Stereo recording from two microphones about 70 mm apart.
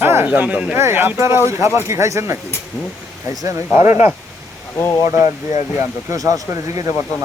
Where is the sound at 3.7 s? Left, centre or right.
Right.